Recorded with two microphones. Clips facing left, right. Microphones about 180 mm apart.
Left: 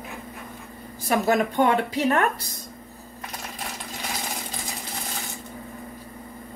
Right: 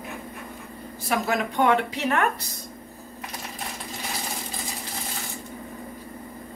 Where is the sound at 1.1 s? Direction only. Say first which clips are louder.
Left 4 dB; 45° left (ahead or behind).